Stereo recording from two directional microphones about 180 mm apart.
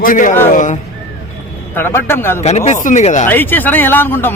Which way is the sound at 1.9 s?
15° left (ahead or behind).